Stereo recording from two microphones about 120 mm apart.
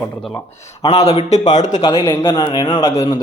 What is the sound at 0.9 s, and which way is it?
Speech, 65° left (ahead or behind).